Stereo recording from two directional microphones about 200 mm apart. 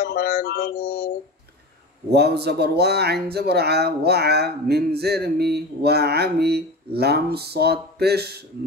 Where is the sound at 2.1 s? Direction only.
55° right (ahead or behind).